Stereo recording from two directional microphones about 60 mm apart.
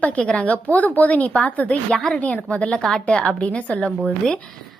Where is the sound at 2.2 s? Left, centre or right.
Left.